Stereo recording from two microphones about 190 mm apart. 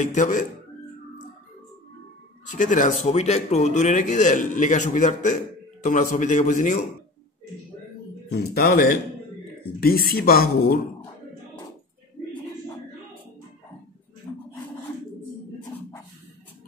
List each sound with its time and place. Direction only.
0.0 s speech: 40° left (ahead or behind)
2.4 s speech: 40° left (ahead or behind)
8.3 s speech: 55° left (ahead or behind)